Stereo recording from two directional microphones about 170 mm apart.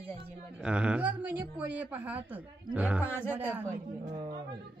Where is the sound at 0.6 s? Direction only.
5° right (ahead or behind).